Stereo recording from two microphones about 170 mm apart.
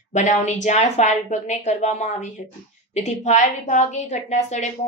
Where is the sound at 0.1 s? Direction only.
45° left (ahead or behind).